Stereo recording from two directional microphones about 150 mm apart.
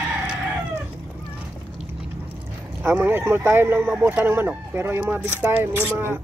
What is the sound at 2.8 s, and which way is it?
Speech, 15° right (ahead or behind).